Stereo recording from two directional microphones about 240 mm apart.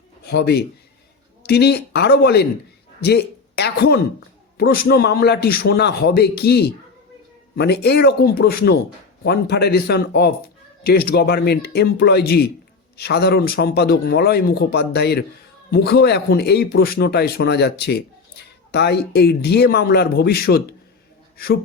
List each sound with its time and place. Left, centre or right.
0.3 s a man's voice: left